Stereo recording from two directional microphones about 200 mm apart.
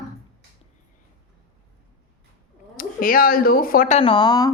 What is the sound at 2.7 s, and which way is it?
Speech, 45° left (ahead or behind).